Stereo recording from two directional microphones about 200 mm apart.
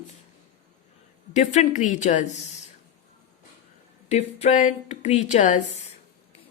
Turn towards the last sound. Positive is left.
turn(degrees=35)  # may be behind; listen again after turning